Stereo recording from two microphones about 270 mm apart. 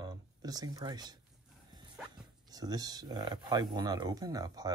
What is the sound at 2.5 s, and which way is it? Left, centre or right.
Speech, centre.